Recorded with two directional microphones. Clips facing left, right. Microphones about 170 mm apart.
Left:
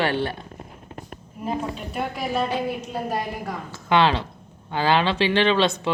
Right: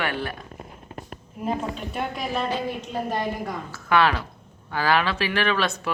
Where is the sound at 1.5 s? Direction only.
Centre (ahead or behind).